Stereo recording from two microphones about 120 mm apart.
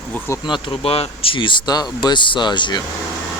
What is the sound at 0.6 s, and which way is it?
Speech, 50° left (ahead or behind).